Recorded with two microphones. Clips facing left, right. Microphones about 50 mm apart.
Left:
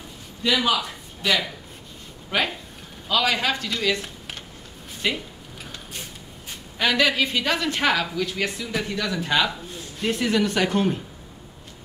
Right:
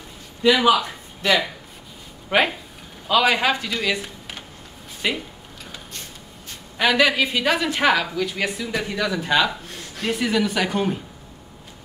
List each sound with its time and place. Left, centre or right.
0.6 s a man's voice: right
2.2 s a woman's voice: centre
5.0 s a woman's voice: centre
6.8 s a woman's voice: centre
9.7 s a sound: right
10.0 s speech: centre